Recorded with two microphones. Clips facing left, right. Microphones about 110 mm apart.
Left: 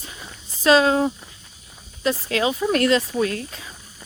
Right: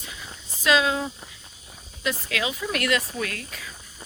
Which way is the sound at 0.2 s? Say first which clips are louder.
Left 9 dB; 35° left (ahead or behind).